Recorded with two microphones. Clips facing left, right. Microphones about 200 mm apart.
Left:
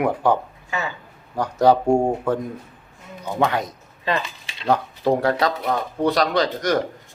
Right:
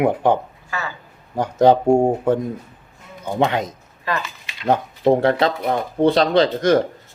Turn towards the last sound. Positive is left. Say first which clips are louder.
# right 5 dB
turn(degrees=-30)  # may be behind; listen again after turning